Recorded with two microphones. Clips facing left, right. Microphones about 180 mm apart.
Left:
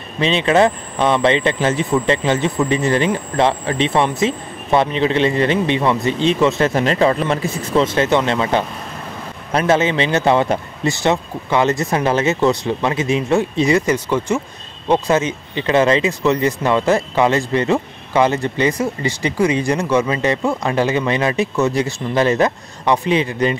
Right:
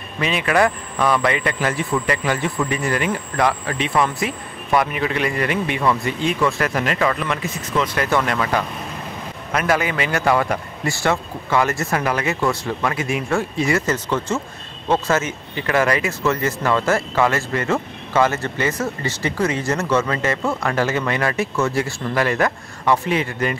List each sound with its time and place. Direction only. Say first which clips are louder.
0.2 s a man's voice: left 4 dB; 25° left (ahead or behind)